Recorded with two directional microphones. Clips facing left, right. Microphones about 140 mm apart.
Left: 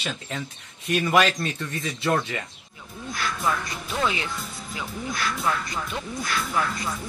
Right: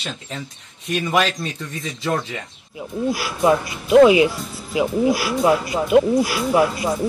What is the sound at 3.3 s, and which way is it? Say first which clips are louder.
Speech: right 8 dB; 25° right (ahead or behind).